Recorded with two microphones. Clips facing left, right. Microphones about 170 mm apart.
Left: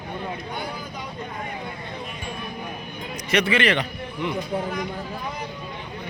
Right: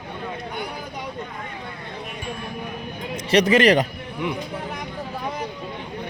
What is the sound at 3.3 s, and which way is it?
Speech, 40° right (ahead or behind).